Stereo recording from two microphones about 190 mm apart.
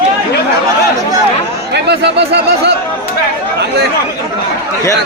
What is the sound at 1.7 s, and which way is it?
Speech, 60° right (ahead or behind).